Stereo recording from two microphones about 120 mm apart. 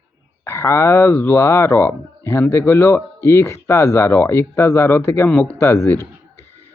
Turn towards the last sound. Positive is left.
turn(degrees=20)  # may be behind; listen again after turning